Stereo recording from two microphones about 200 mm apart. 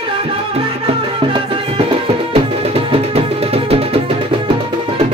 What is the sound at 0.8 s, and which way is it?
Music, 25° right (ahead or behind).